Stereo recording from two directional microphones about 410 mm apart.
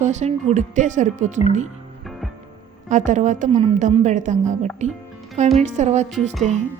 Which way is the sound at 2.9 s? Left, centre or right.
Centre.